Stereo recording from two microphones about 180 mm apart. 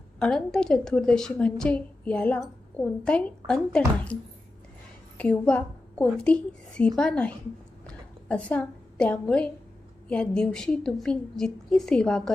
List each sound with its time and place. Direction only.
0.2 s a woman's voice: 5° left (ahead or behind)
7.9 s a sound: 5° left (ahead or behind)
10.1 s a woman's voice: 5° left (ahead or behind)